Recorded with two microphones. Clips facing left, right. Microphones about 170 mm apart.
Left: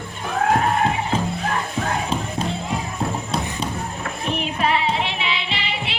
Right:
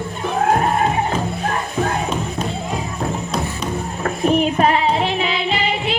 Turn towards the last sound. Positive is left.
turn(degrees=-45)  # may be behind; listen again after turning